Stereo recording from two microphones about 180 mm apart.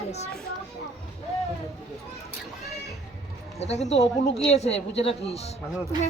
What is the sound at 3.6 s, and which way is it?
A woman's voice, 35° left (ahead or behind).